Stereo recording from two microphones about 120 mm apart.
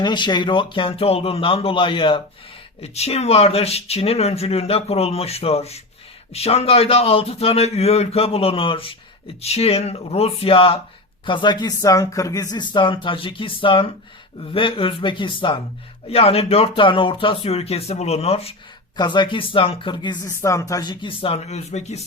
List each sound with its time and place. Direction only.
0.0 s speech: 40° left (ahead or behind)
2.8 s speech: 60° left (ahead or behind)
16.0 s speech: 55° left (ahead or behind)
18.9 s speech: 40° left (ahead or behind)
20.2 s speech: 25° left (ahead or behind); by 22.0 s 70° left (ahead or behind)